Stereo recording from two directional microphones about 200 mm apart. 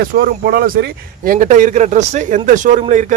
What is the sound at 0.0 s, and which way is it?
Speech, 50° right (ahead or behind).